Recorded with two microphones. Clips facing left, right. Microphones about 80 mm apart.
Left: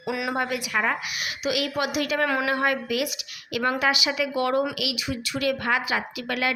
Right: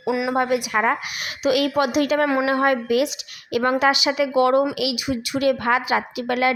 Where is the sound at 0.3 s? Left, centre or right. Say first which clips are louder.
Right 6 dB; right.